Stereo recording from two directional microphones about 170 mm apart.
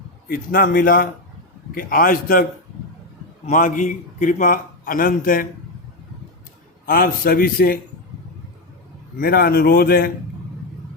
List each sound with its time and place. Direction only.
0.3 s a man's voice: 55° left (ahead or behind)
6.8 s a man's voice: 60° left (ahead or behind)
9.1 s a man's voice: 60° left (ahead or behind)